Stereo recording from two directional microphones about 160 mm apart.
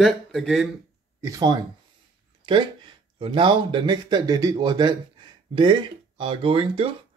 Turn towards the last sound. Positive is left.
turn(degrees=-35)  # may be behind; listen again after turning